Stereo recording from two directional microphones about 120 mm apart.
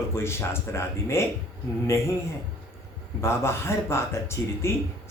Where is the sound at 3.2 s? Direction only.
20° left (ahead or behind).